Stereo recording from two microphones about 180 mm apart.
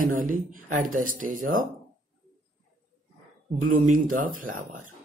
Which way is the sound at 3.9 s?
50° right (ahead or behind).